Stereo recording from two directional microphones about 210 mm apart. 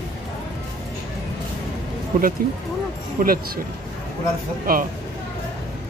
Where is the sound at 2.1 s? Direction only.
40° right (ahead or behind).